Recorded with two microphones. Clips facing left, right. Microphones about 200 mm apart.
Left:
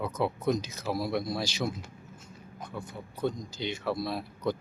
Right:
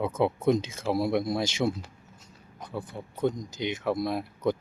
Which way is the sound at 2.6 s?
35° right (ahead or behind).